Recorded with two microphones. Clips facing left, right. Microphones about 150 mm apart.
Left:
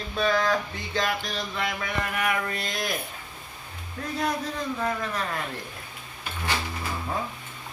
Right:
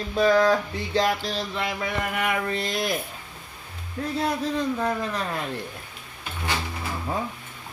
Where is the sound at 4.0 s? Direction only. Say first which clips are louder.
Right 5 dB; 25° right (ahead or behind).